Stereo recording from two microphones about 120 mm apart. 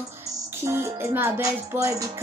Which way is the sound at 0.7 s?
20° right (ahead or behind).